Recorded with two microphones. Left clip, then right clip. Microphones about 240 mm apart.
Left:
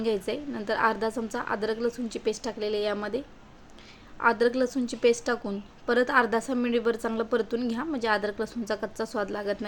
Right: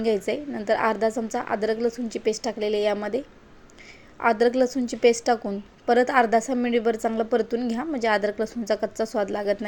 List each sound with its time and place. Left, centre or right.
0.0 s a woman's voice: centre